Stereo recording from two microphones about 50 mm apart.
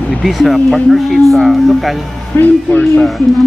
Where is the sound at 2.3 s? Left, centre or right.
Left.